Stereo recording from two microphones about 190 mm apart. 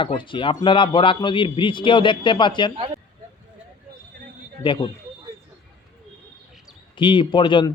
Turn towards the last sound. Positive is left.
turn(degrees=25)  # may be behind; listen again after turning